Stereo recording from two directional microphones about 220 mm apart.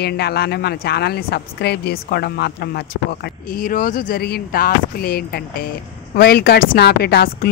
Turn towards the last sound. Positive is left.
turn(degrees=45)  # may be behind; listen again after turning